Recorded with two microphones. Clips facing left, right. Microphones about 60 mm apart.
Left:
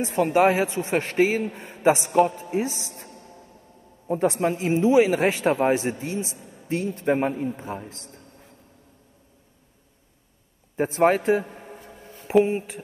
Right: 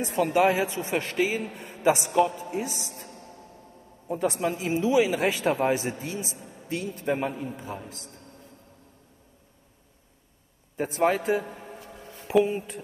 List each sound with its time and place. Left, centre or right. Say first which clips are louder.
0.0 s a man's voice: left 3 dB; left
2.1 s a man's voice: left 3 dB; left
4.1 s a man's voice: left 4 dB; left
6.4 s a sound: right 1 dB; centre
6.7 s a man's voice: left 5 dB; left
11.0 s a man's voice: left 4 dB; left
11.8 s a sound: even; right
12.4 s speech: left 3 dB; left